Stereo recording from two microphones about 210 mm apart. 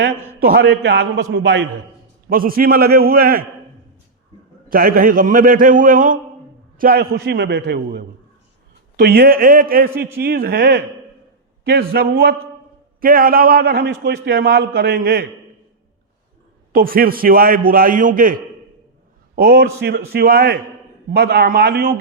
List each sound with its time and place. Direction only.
0.4 s a man's voice: 50° right (ahead or behind)
2.3 s a man's voice: 45° right (ahead or behind)
4.7 s a man's voice: 45° right (ahead or behind)
16.7 s a man's voice: 45° right (ahead or behind)